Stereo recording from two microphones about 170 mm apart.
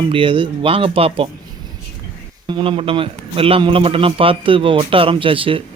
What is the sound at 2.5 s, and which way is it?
Speech, 30° right (ahead or behind).